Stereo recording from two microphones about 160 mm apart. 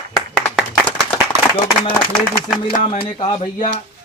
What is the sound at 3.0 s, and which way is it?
Speech, 35° left (ahead or behind).